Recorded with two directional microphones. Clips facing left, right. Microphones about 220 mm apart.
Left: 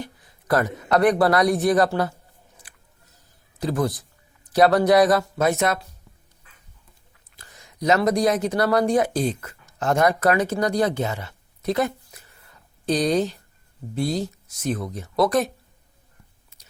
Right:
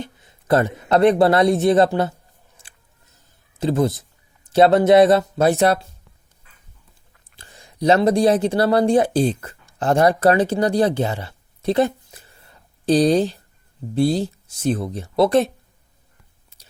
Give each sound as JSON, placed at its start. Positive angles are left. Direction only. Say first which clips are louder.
{"t": 0.0, "sound": "speech", "louder": "right 2 dB", "side_deg": -25}
{"t": 2.6, "sound": "chewing", "louder": "left 1 dB", "side_deg": -25}
{"t": 3.6, "sound": "speech", "louder": "right 4 dB", "side_deg": -25}
{"t": 7.3, "sound": "speech", "louder": "right 5 dB", "side_deg": -30}
{"t": 16.5, "sound": "chewing", "louder": "right 3 dB", "side_deg": -30}